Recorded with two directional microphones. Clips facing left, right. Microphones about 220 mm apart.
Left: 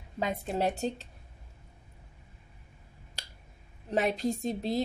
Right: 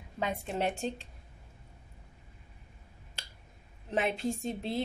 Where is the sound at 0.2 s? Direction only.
35° left (ahead or behind).